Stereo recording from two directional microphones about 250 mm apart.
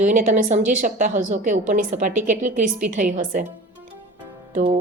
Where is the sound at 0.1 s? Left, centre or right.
Right.